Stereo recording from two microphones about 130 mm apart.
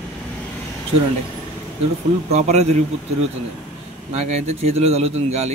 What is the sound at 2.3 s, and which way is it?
Speech, 55° right (ahead or behind).